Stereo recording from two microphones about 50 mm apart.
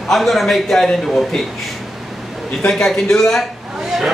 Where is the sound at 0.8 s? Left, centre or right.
Centre.